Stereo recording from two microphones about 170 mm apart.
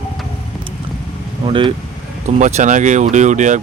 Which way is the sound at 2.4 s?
45° right (ahead or behind).